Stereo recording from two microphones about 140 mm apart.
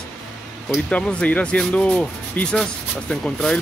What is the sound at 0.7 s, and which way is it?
Speech, 5° left (ahead or behind).